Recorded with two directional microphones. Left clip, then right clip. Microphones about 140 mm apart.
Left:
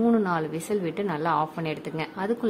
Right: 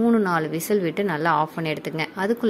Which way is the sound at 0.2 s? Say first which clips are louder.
Right 4 dB; 20° right (ahead or behind).